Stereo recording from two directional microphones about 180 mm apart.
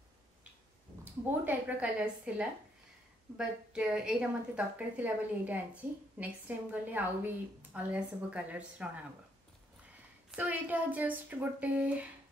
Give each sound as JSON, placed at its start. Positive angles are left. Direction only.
{"t": 1.3, "sound": "a woman's voice", "side_deg": -10}
{"t": 10.3, "sound": "a woman's voice", "side_deg": -10}